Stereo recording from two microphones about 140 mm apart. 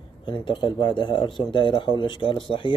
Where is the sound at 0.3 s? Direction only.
35° left (ahead or behind).